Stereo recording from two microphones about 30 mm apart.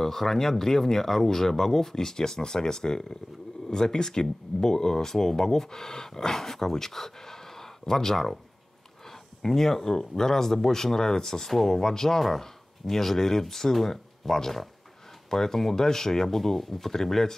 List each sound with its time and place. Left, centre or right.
0.0 s speech: centre